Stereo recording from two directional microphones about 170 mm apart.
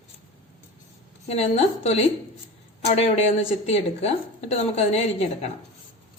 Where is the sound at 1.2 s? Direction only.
35° left (ahead or behind).